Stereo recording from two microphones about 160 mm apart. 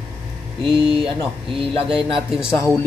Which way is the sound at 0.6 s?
35° right (ahead or behind).